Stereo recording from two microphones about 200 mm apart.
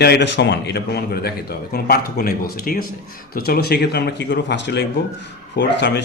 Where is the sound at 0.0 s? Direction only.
55° left (ahead or behind).